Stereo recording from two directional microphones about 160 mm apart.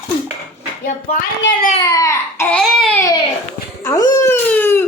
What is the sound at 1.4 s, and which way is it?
Speech, 90° left.